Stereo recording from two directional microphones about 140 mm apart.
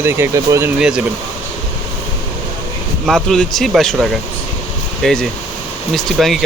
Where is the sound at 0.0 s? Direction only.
15° right (ahead or behind).